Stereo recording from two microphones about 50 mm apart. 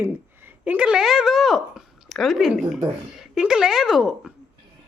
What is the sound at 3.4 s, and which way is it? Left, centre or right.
Speech, centre.